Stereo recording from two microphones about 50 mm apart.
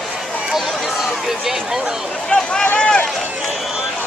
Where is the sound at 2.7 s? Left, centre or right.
Centre.